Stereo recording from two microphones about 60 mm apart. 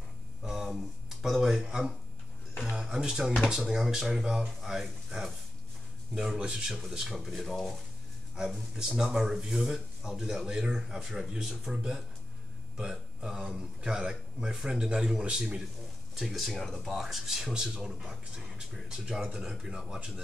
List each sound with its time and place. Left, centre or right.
0.4 s a sound: centre
3.4 s speech: centre
16.2 s speech: centre